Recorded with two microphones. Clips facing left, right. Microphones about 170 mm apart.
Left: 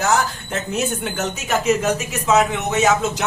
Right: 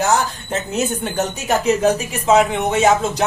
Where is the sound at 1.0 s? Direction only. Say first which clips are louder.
Right 3 dB; 35° right (ahead or behind).